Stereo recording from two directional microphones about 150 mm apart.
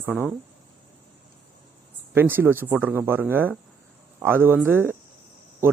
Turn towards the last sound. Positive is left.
turn(degrees=-15)  # may be behind; listen again after turning